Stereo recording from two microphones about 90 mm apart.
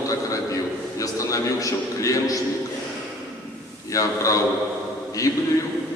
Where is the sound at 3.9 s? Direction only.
40° left (ahead or behind).